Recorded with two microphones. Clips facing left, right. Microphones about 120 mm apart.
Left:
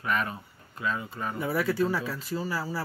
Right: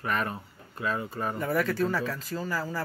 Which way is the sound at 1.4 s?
10° left (ahead or behind).